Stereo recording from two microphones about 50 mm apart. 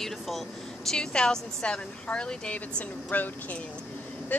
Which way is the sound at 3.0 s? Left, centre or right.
Left.